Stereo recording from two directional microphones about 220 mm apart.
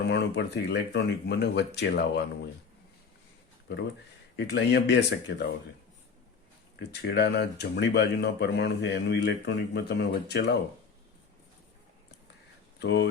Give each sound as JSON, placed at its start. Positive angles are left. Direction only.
{"t": 0.1, "sound": "speech", "side_deg": 50}
{"t": 4.4, "sound": "speech", "side_deg": 50}
{"t": 6.9, "sound": "speech", "side_deg": 50}
{"t": 12.8, "sound": "speech", "side_deg": 50}